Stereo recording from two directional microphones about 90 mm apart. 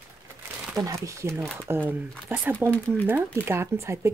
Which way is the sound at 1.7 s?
20° right (ahead or behind).